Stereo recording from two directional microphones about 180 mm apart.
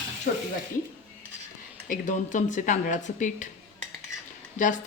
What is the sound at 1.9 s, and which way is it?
A woman's voice, 45° left (ahead or behind).